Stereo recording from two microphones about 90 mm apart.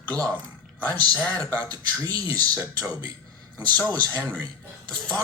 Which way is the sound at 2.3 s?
20° left (ahead or behind).